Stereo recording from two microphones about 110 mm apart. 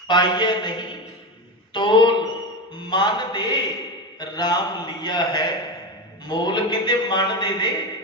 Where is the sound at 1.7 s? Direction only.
45° left (ahead or behind).